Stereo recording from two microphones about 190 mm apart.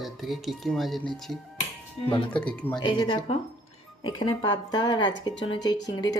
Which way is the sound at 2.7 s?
25° left (ahead or behind).